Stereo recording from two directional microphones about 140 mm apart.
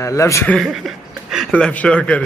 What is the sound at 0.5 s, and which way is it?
Speech, centre (ahead or behind).